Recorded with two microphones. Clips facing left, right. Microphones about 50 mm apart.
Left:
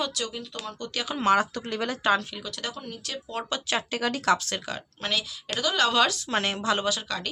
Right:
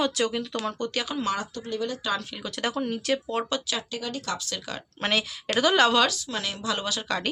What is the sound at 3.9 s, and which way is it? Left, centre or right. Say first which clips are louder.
Speech: left 7 dB; left.